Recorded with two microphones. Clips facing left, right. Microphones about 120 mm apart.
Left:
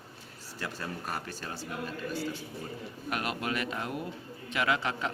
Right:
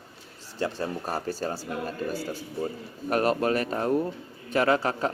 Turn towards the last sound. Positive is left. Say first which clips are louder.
# right 6 dB
turn(degrees=-40)  # may be behind; listen again after turning